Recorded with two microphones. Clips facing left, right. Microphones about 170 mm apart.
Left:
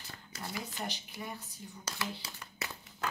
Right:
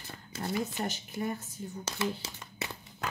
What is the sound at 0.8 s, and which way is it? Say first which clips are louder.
Speech: right 8 dB; 50° right (ahead or behind).